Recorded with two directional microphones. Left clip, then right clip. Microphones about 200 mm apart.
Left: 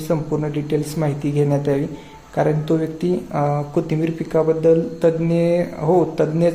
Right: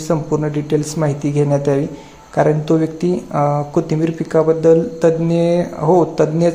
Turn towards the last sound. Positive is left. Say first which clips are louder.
# right 3 dB
turn(degrees=-15)  # may be behind; listen again after turning